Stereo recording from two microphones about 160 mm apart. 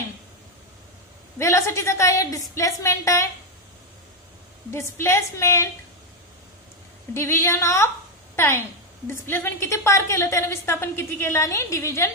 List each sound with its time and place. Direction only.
1.4 s a woman's voice: 20° left (ahead or behind)
4.6 s a woman's voice: 15° left (ahead or behind)
7.2 s a woman's voice: 15° left (ahead or behind)